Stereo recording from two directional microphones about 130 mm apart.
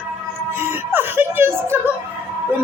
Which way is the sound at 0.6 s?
15° right (ahead or behind).